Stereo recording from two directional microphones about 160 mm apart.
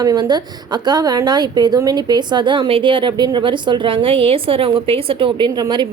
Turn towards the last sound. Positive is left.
turn(degrees=-25)  # may be behind; listen again after turning